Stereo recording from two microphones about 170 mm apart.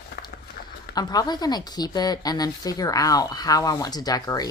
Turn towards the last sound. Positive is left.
turn(degrees=20)  # may be behind; listen again after turning